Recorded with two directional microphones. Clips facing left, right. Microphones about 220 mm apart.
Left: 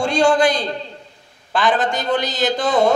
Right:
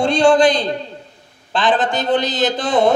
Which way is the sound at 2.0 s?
20° right (ahead or behind).